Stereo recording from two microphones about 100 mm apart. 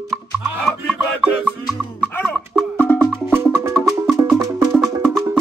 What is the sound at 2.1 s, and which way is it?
Music, 15° left (ahead or behind).